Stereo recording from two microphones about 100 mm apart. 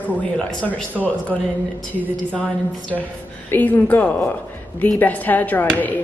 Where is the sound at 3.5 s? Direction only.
15° left (ahead or behind).